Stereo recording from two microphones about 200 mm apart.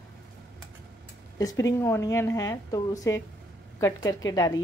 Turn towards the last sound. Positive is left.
turn(degrees=20)  # may be behind; listen again after turning